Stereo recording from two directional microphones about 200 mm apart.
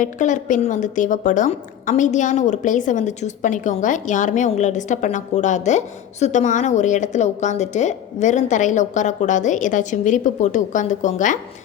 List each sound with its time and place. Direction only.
0.0 s a woman's voice: 40° left (ahead or behind)